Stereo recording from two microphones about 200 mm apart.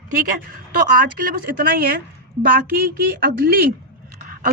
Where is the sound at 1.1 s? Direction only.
50° right (ahead or behind).